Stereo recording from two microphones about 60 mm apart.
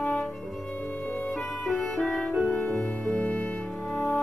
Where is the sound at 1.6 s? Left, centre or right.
Centre.